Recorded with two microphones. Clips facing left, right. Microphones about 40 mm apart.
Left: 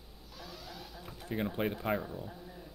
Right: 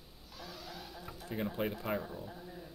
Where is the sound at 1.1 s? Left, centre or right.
Left.